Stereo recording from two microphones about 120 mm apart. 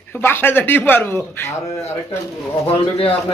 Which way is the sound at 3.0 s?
50° left (ahead or behind).